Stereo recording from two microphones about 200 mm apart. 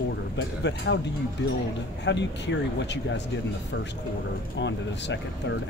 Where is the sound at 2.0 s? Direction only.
60° left (ahead or behind).